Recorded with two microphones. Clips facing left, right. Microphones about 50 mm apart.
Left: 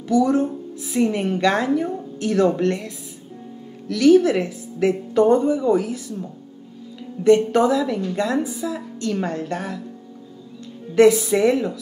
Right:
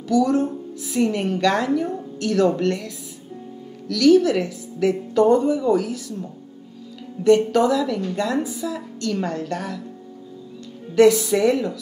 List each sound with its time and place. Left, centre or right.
0.1 s a woman's voice: left
7.2 s a woman's voice: left
11.0 s a woman's voice: left